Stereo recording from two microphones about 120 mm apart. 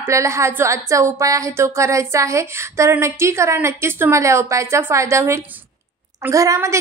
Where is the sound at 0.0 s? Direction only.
25° right (ahead or behind).